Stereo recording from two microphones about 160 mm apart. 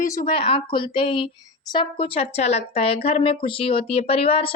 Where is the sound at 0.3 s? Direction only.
35° left (ahead or behind).